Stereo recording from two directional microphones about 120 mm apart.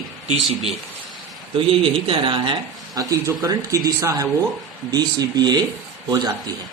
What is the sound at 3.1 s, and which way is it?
Speech, 30° right (ahead or behind).